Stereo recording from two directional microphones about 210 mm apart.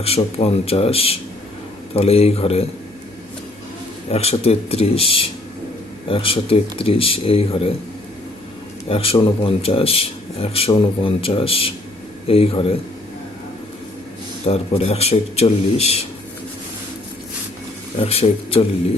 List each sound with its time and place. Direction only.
0.0 s a man's voice: 30° left (ahead or behind)
4.1 s a man's voice: 30° left (ahead or behind)
8.9 s a man's voice: 25° left (ahead or behind)
14.4 s a man's voice: 30° left (ahead or behind)
18.0 s a man's voice: 30° left (ahead or behind)